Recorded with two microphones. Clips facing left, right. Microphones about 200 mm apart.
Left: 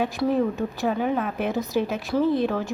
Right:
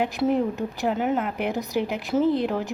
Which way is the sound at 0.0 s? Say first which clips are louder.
Even; 20° right (ahead or behind).